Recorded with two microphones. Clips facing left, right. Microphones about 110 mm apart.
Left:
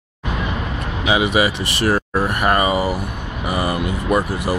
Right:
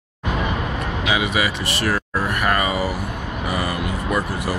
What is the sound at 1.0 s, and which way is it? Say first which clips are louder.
Speech: left 5 dB; 25° left (ahead or behind).